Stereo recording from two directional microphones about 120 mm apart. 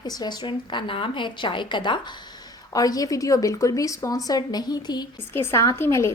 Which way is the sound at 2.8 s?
30° left (ahead or behind).